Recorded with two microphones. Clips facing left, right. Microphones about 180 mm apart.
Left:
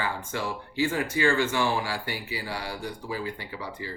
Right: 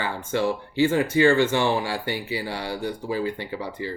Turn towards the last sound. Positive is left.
turn(degrees=-25)  # may be behind; listen again after turning